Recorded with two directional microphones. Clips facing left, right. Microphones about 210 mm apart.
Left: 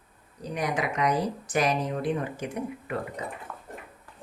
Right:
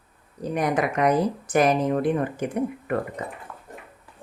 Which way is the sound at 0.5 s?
50° right (ahead or behind).